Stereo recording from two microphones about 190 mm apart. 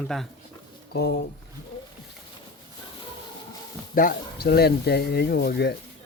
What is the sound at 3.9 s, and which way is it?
Speech, 50° left (ahead or behind).